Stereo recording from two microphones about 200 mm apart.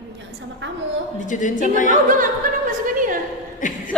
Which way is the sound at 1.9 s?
40° right (ahead or behind).